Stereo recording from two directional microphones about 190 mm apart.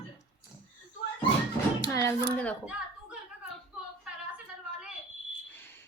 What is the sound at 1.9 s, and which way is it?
Speech, 10° left (ahead or behind).